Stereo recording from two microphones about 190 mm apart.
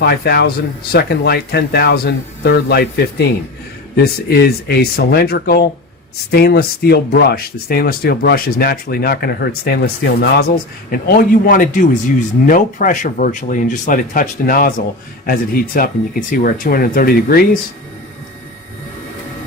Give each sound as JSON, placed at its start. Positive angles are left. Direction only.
{"t": 0.0, "sound": "speech", "side_deg": 60}